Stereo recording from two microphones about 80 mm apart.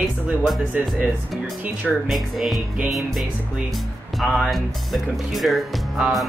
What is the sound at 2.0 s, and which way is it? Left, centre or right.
Speech, centre.